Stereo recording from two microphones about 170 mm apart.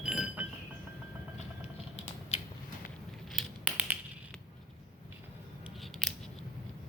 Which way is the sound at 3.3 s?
5° right (ahead or behind).